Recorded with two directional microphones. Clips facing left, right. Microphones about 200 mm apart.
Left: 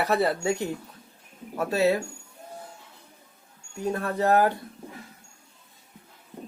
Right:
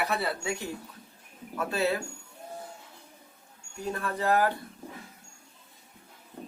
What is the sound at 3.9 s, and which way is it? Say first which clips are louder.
Speech: left 4 dB; 40° left (ahead or behind).